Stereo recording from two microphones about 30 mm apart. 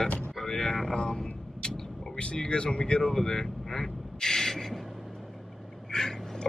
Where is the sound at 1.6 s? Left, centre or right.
Centre.